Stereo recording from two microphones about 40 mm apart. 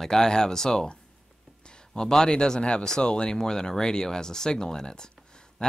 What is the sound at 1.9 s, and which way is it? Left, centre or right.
Speech, centre.